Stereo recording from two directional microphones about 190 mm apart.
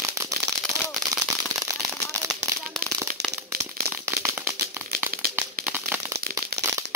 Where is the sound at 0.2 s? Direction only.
15° right (ahead or behind).